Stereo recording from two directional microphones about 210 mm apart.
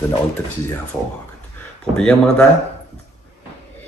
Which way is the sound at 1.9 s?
5° left (ahead or behind).